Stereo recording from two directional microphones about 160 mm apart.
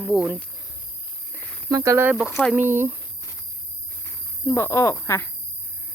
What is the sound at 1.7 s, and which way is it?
Speech, 20° right (ahead or behind).